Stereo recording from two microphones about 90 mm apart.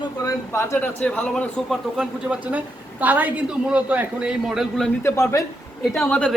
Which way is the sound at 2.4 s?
20° right (ahead or behind).